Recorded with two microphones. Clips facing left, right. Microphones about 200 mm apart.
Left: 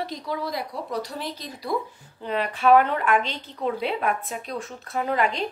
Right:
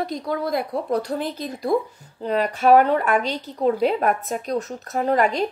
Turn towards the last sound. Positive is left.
turn(degrees=-45)  # may be behind; listen again after turning